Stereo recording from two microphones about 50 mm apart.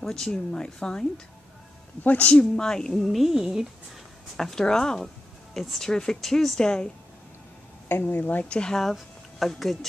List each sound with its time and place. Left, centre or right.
0.0 s speech: centre
2.0 s speech: left
2.3 s speech: centre
3.1 s speech: centre
4.4 s speech: centre
7.9 s speech: left
8.5 s speech: centre
8.8 s speech: centre